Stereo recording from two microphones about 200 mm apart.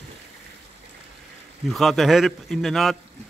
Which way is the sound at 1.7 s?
Centre (ahead or behind).